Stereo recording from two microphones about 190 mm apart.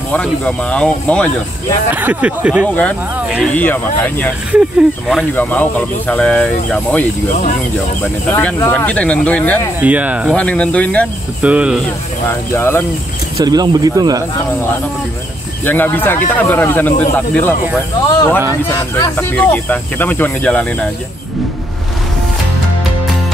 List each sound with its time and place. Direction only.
0.1 s speech: 5° left (ahead or behind)
1.9 s speech: 10° right (ahead or behind)
2.6 s speech: 5° left (ahead or behind)
3.2 s snake: 10° right (ahead or behind)
3.4 s speech: 10° left (ahead or behind)
4.5 s speech: 5° right (ahead or behind)
5.3 s speech: 10° left (ahead or behind)
9.8 s speech: 10° right (ahead or behind)
10.3 s speech: 5° left (ahead or behind)
11.4 s speech: 5° right (ahead or behind)
12.3 s speech: 15° left (ahead or behind)
13.4 s speech: 20° right (ahead or behind)
15.6 s speech: 10° left (ahead or behind)